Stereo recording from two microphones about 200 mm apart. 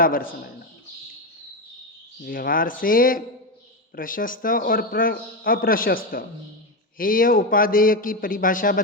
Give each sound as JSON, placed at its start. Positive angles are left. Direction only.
{"t": 0.0, "sound": "a man's voice", "side_deg": 45}
{"t": 2.2, "sound": "a man's voice", "side_deg": 45}